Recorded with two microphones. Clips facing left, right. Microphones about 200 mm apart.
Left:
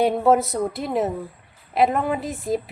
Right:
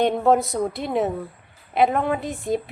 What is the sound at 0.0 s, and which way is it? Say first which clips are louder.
A woman's voice: left 1 dB; 5° left (ahead or behind).